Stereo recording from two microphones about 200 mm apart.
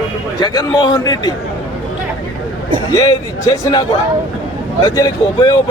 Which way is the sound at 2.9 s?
20° left (ahead or behind).